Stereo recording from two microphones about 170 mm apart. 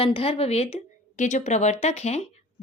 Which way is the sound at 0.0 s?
35° left (ahead or behind).